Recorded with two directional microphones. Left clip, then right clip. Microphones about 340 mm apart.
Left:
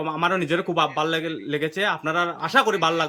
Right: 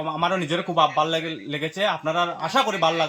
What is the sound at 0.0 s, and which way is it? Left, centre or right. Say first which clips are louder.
A man's voice: left 1 dB; centre.